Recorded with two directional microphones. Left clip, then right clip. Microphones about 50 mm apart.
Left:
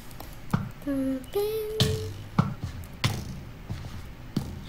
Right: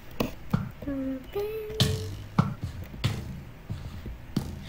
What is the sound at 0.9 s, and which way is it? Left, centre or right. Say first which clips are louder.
Speech: left 4 dB; centre.